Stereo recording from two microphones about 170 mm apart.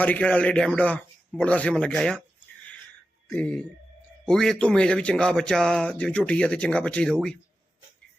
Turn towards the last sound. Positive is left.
turn(degrees=5)  # may be behind; listen again after turning